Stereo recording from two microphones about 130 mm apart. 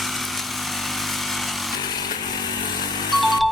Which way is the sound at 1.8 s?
35° left (ahead or behind).